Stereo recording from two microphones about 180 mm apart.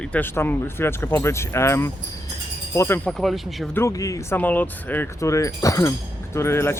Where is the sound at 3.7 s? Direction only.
15° left (ahead or behind).